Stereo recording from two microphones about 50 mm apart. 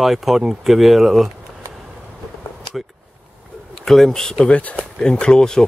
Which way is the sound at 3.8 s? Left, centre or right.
Centre.